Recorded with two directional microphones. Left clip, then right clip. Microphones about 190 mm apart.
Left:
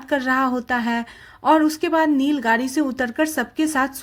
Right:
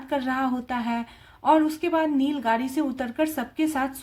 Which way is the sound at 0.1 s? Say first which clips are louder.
Left 6 dB; 40° left (ahead or behind).